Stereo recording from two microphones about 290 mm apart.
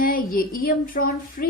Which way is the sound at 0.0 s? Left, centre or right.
Left.